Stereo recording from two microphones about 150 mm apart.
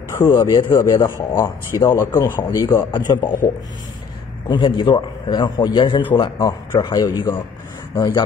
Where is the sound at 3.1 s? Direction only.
25° left (ahead or behind).